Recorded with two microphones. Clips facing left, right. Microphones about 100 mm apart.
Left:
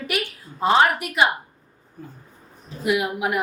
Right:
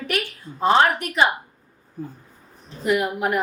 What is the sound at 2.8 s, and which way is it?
Speech, 5° left (ahead or behind).